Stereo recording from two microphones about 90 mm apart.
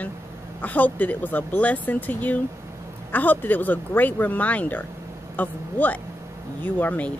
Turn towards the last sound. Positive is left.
turn(degrees=20)  # may be behind; listen again after turning